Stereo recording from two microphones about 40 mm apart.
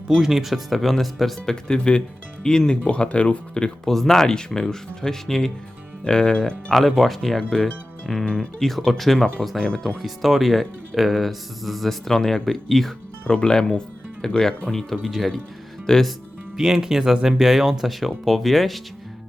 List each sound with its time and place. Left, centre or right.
0.1 s speech: centre
1.6 s speech: left
2.8 s speech: left
3.8 s speech: centre
7.0 s speech: centre
8.2 s speech: centre
8.6 s speech: centre
9.6 s speech: left
9.8 s speech: centre
13.2 s speech: left; by 15.3 s centre
15.9 s speech: centre
16.6 s speech: centre